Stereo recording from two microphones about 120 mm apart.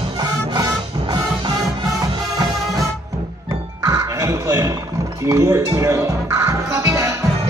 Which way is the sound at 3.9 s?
25° right (ahead or behind).